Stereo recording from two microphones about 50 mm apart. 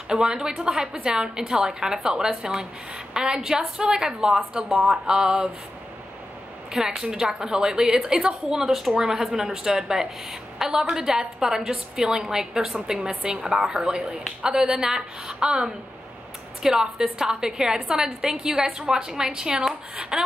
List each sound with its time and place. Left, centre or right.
0.1 s a woman's voice: centre
6.7 s a woman's voice: centre